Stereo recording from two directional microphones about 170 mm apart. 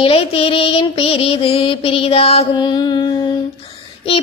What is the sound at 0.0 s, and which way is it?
Child singing, 35° left (ahead or behind).